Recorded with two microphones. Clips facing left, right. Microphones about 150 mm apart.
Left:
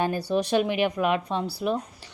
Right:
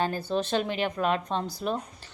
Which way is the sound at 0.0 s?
15° left (ahead or behind).